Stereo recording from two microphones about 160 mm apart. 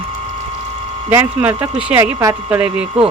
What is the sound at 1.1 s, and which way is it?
Speech, 10° right (ahead or behind).